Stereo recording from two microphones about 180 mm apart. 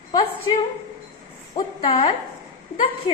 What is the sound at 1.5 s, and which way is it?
Speech, 30° left (ahead or behind).